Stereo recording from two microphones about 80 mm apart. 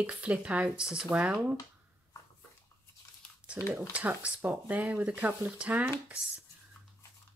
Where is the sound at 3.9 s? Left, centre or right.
Centre.